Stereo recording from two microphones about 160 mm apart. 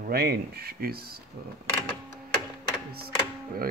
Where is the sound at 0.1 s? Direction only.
75° right (ahead or behind).